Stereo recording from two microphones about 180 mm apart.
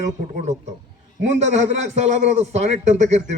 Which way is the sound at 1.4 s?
40° right (ahead or behind).